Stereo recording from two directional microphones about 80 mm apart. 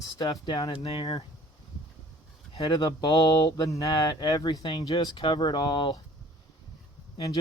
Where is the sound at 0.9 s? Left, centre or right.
Left.